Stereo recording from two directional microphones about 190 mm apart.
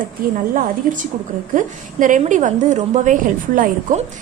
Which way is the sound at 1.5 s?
45° right (ahead or behind).